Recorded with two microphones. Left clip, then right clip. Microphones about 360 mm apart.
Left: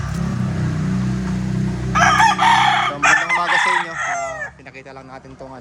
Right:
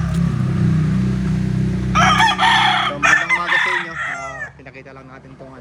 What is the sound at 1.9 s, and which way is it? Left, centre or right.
Chicken, centre.